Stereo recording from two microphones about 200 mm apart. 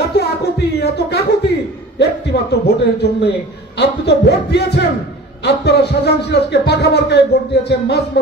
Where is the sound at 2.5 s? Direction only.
55° left (ahead or behind).